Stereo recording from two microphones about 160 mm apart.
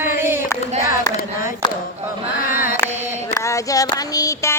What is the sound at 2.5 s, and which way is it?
Mantra, 60° left (ahead or behind).